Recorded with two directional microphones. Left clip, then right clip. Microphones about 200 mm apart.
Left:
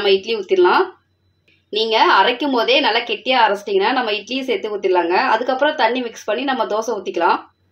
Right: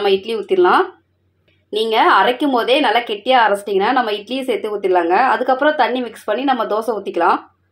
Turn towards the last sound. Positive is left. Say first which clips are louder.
# right 1 dB
turn(degrees=-20)  # may be behind; listen again after turning